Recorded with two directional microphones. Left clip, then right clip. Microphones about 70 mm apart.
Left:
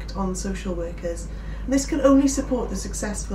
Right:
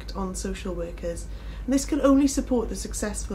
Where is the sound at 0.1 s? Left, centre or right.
Left.